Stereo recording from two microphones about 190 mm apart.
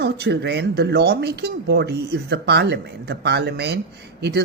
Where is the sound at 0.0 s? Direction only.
60° right (ahead or behind).